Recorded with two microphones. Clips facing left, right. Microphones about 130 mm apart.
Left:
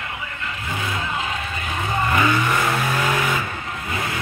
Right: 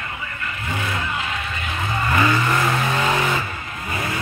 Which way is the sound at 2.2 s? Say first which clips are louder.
Even; centre (ahead or behind).